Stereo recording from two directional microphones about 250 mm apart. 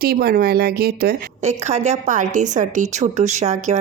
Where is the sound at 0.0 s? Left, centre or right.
Right.